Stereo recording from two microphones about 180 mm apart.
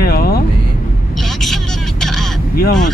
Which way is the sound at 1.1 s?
Centre (ahead or behind).